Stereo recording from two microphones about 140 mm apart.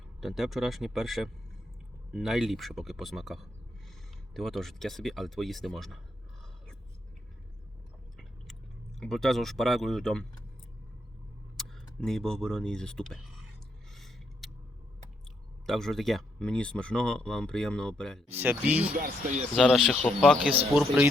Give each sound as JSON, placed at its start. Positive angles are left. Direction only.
{"t": 0.2, "sound": "speech", "side_deg": 0}
{"t": 9.0, "sound": "speech", "side_deg": 5}
{"t": 11.5, "sound": "speech", "side_deg": 5}
{"t": 13.9, "sound": "a sound", "side_deg": 0}
{"t": 15.6, "sound": "speech", "side_deg": 0}
{"t": 18.3, "sound": "speech", "side_deg": -15}
{"t": 18.9, "sound": "speech", "side_deg": -75}
{"t": 19.5, "sound": "a man's voice", "side_deg": 0}
{"t": 20.7, "sound": "speech", "side_deg": -10}